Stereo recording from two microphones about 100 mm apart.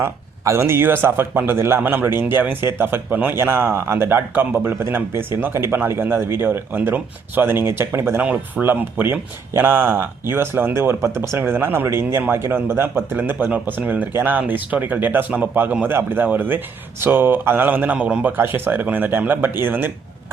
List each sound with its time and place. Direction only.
0.0 s a man's voice: 25° right (ahead or behind)